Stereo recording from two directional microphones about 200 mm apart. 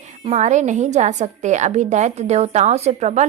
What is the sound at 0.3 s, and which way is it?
A woman's voice, 35° right (ahead or behind).